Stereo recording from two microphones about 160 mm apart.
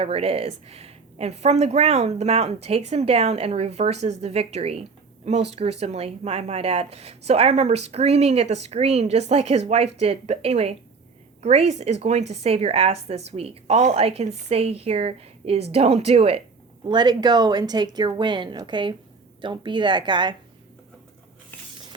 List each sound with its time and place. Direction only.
0.0 s speech: 40° right (ahead or behind)
16.9 s speech: 25° right (ahead or behind)